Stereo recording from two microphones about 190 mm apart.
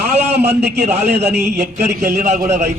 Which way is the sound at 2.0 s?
10° right (ahead or behind).